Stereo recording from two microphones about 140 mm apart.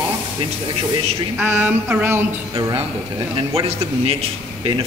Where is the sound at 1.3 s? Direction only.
15° right (ahead or behind).